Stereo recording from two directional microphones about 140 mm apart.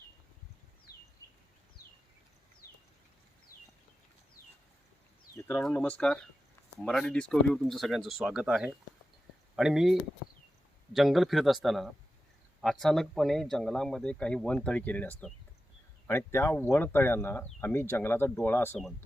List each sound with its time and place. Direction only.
5.7 s speech: 10° left (ahead or behind)